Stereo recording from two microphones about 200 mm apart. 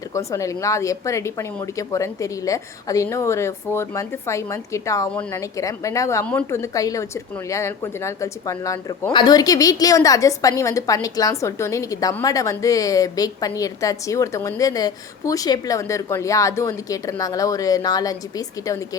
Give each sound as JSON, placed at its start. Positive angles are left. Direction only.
{"t": 0.1, "sound": "speech", "side_deg": 15}